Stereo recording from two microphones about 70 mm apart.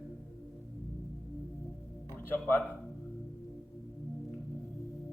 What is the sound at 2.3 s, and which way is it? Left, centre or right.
Speech, left.